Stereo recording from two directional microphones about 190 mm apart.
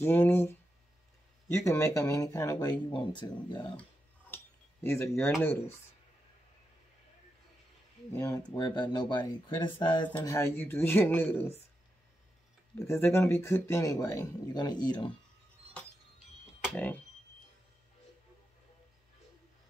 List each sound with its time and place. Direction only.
0.0 s speech: 10° left (ahead or behind)
1.6 s speech: 15° left (ahead or behind)
4.8 s speech: 10° left (ahead or behind)
8.1 s speech: 20° left (ahead or behind)
10.0 s speech: 15° left (ahead or behind)
12.7 s speech: 15° left (ahead or behind)
16.7 s speech: 10° left (ahead or behind)